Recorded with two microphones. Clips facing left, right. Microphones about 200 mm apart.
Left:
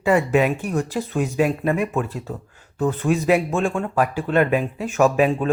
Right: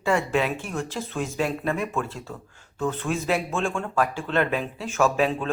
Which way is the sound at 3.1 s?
5° left (ahead or behind).